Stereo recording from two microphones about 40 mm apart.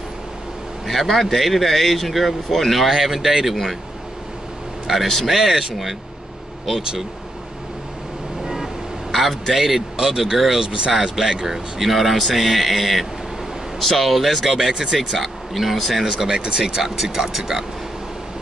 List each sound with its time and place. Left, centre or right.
0.8 s speech: centre
4.9 s speech: centre
9.1 s speech: centre
10.6 s speech: right
10.9 s speech: centre
15.2 s speech: centre
16.3 s speech: right
16.8 s speech: centre